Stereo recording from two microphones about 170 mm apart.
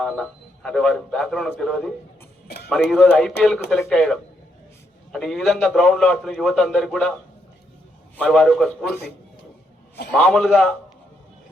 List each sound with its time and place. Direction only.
0.0 s a man's voice: 5° left (ahead or behind)
8.1 s a man's voice: 5° left (ahead or behind)
10.1 s a man's voice: 5° left (ahead or behind)